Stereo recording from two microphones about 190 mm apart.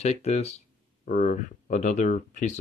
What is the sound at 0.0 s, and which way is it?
Speech, 35° left (ahead or behind).